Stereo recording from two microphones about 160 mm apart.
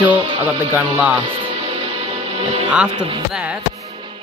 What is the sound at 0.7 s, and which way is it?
Speech, 10° right (ahead or behind).